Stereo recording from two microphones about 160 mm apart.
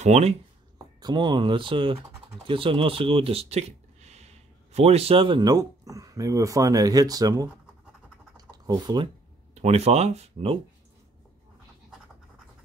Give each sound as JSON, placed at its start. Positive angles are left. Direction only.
{"t": 0.0, "sound": "speech", "side_deg": -40}
{"t": 1.0, "sound": "speech", "side_deg": -30}
{"t": 8.4, "sound": "typing", "side_deg": -25}
{"t": 9.6, "sound": "speech", "side_deg": -40}